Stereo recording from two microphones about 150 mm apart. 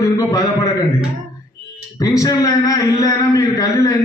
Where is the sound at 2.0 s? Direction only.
20° left (ahead or behind).